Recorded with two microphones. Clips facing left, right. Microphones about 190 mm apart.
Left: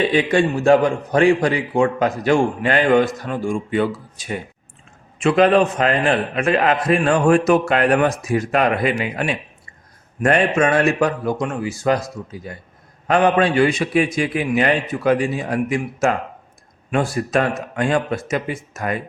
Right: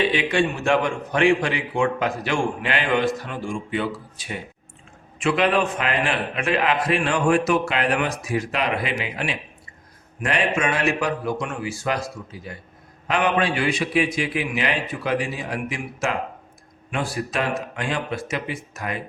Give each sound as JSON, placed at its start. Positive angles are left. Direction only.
{"t": 0.0, "sound": "a man's voice", "side_deg": 40}